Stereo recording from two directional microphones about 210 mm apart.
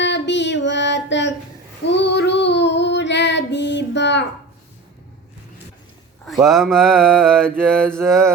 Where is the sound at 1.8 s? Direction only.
55° left (ahead or behind).